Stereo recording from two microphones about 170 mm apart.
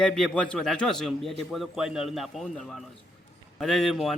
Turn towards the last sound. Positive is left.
turn(degrees=0)  # may be behind; listen again after turning